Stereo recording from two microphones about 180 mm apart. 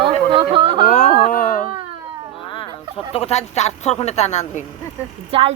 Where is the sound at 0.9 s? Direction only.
45° left (ahead or behind).